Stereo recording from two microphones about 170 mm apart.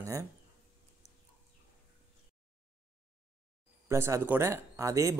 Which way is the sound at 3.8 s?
15° right (ahead or behind).